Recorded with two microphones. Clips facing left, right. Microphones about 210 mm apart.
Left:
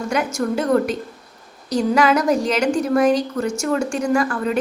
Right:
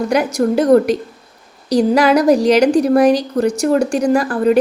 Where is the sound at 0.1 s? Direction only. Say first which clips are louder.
Right 4 dB; 35° right (ahead or behind).